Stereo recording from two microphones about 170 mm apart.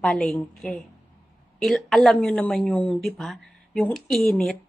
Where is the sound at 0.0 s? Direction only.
5° left (ahead or behind).